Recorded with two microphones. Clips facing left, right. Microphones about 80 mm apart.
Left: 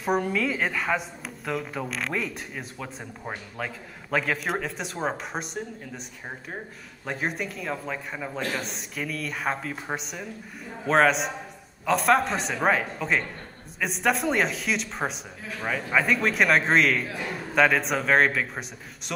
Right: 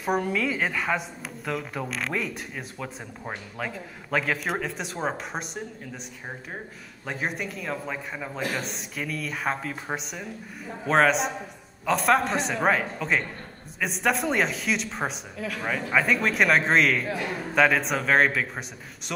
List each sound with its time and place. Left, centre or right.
0.0 s speech: centre
7.1 s speech: centre